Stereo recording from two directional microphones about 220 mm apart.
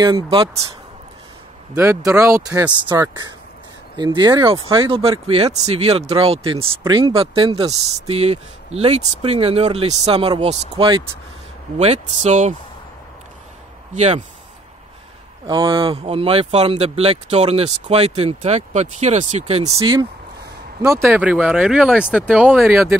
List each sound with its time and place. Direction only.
0.0 s speech: 20° right (ahead or behind)
1.7 s speech: 10° right (ahead or behind); by 12.5 s 30° right (ahead or behind)
13.9 s speech: 30° right (ahead or behind)
15.4 s speech: 20° right (ahead or behind)
20.8 s speech: 15° right (ahead or behind)